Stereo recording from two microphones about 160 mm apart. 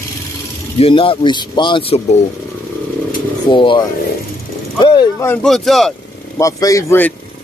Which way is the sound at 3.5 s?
30° left (ahead or behind).